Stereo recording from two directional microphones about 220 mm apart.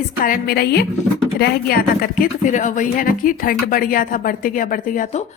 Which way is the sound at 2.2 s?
35° left (ahead or behind).